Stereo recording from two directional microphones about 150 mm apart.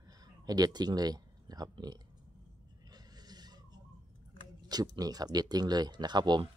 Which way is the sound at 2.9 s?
25° right (ahead or behind).